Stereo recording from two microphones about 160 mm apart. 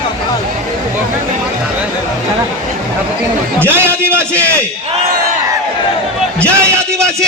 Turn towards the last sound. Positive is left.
turn(degrees=-15)  # may be behind; listen again after turning